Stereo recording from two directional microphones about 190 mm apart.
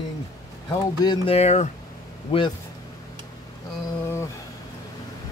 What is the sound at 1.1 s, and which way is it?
Speech, 30° left (ahead or behind).